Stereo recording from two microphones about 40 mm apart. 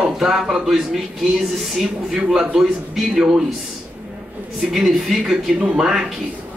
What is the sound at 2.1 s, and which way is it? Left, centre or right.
Speech, centre.